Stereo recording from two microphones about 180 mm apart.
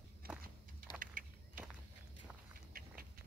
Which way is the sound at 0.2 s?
55° right (ahead or behind).